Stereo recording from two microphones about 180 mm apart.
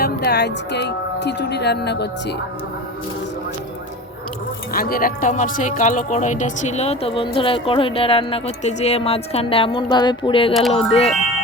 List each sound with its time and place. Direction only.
0.0 s speech: 65° left (ahead or behind)
4.7 s speech: 55° left (ahead or behind); by 11.1 s 35° left (ahead or behind)